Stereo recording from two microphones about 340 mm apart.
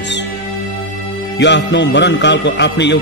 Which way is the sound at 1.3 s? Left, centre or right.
Left.